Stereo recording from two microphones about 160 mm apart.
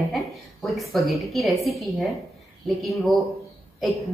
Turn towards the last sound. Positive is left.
turn(degrees=0)  # may be behind; listen again after turning